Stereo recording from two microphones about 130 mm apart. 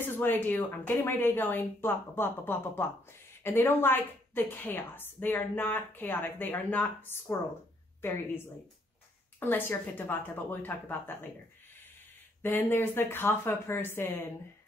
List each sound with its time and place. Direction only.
0.0 s a woman's voice: 15° left (ahead or behind)
9.4 s a woman's voice: 15° left (ahead or behind)
12.4 s a woman's voice: 15° left (ahead or behind)